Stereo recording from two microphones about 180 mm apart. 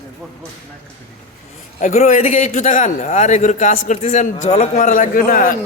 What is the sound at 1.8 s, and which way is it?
A man's voice, 40° left (ahead or behind).